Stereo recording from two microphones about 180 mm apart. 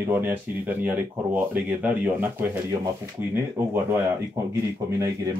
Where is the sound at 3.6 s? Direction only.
15° right (ahead or behind).